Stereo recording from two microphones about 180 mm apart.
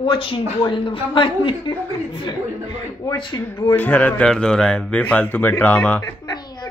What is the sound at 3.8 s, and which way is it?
Speech, 10° left (ahead or behind).